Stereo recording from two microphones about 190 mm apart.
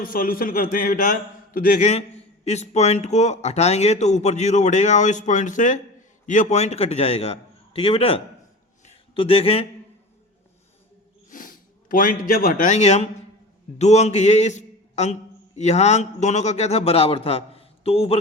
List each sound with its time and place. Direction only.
0.0 s a man's voice: 50° left (ahead or behind); by 8.2 s 30° left (ahead or behind)
8.8 s a sound: 30° left (ahead or behind)
11.3 s a man's voice: 45° left (ahead or behind)